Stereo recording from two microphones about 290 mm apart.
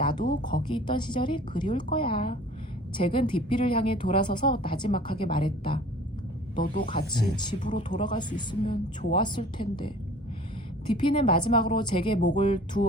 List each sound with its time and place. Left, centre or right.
0.0 s a sound: centre
0.7 s a woman's voice: centre
6.9 s a woman's voice: centre
8.6 s a woman's voice: left